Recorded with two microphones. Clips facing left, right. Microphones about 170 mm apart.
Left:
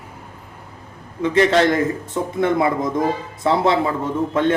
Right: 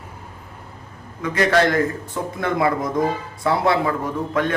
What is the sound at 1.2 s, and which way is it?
Speech, 25° left (ahead or behind).